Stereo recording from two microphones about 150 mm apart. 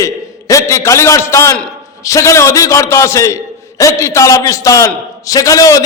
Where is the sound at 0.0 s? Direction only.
20° left (ahead or behind).